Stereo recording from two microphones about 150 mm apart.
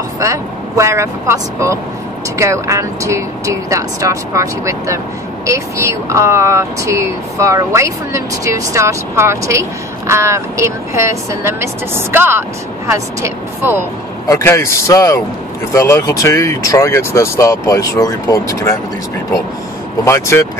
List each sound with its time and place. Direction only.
0.2 s speech: 20° right (ahead or behind)
14.2 s speech: 20° left (ahead or behind)
20.1 s speech: 20° left (ahead or behind)